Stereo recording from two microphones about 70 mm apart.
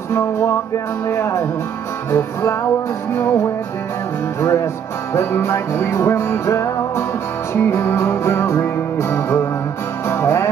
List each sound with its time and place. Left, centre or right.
0.1 s music: left